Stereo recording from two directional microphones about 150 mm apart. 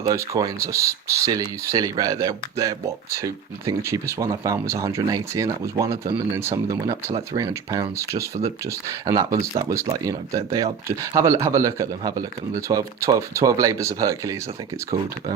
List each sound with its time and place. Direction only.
0.0 s speech: 25° right (ahead or behind)